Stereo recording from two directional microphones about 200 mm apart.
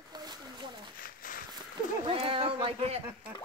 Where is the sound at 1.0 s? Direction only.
45° left (ahead or behind).